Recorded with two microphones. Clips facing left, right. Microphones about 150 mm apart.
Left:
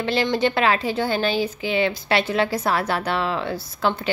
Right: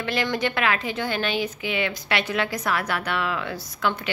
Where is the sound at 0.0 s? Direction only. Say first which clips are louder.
Left 4 dB; 30° left (ahead or behind).